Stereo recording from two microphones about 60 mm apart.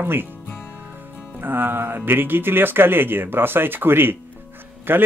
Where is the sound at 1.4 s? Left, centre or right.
Right.